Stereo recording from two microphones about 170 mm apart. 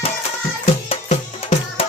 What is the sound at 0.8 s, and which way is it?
Music, 35° left (ahead or behind).